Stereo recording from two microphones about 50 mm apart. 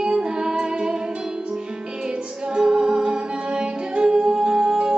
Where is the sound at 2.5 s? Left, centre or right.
Centre.